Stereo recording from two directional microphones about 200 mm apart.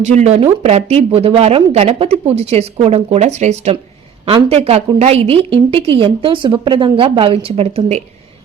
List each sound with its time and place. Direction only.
0.0 s a woman's voice: 35° right (ahead or behind)